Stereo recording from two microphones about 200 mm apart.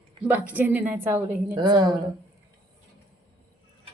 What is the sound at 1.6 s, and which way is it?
Speech, 20° right (ahead or behind).